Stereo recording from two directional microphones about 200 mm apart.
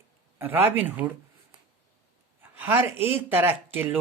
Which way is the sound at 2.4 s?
10° right (ahead or behind).